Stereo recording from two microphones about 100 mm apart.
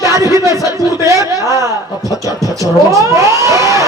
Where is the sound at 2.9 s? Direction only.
30° right (ahead or behind).